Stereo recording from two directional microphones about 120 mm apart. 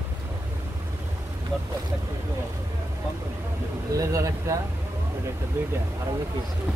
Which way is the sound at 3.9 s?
30° right (ahead or behind).